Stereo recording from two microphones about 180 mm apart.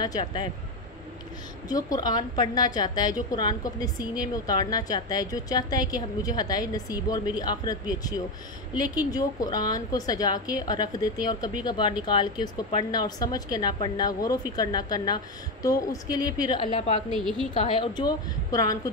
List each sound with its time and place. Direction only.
0.0 s a woman's voice: 25° left (ahead or behind)
1.7 s a woman's voice: 20° left (ahead or behind)
17.1 s a woman's voice: centre (ahead or behind)
17.6 s a woman's voice: 30° left (ahead or behind)